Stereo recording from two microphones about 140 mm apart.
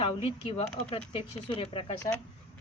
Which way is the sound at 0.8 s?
35° left (ahead or behind).